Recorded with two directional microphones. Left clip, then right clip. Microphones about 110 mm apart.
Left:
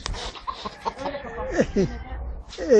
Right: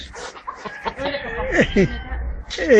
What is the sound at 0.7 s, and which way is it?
Speech, centre (ahead or behind).